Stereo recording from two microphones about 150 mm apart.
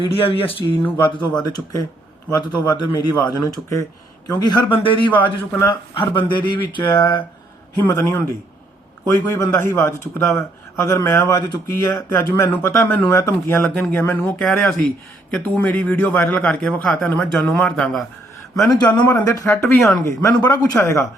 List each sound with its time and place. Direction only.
0.2 s speech: 40° left (ahead or behind)
7.8 s a man's voice: 20° left (ahead or behind)
9.3 s a man's voice: 20° left (ahead or behind)
14.3 s a man's voice: 5° left (ahead or behind)
18.6 s speech: 25° left (ahead or behind)
18.9 s a man's voice: 10° left (ahead or behind)
19.6 s speech: centre (ahead or behind)
20.1 s a man's voice: 20° left (ahead or behind)